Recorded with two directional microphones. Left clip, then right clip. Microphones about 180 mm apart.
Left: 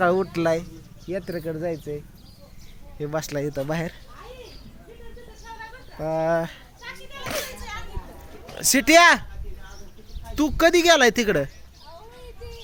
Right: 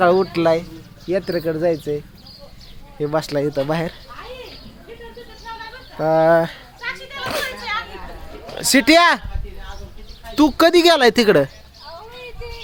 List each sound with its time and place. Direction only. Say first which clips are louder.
0.0 s speech: right 6 dB; centre (ahead or behind)
1.0 s speech: right 9 dB; 20° right (ahead or behind)
3.0 s speech: right 7 dB; 5° right (ahead or behind)
6.0 s speech: right 9 dB; 20° right (ahead or behind)
7.3 s children playing: right 6 dB; centre (ahead or behind)
8.5 s speech: right 3 dB; 5° right (ahead or behind)
10.3 s speech: right 5 dB; 15° right (ahead or behind)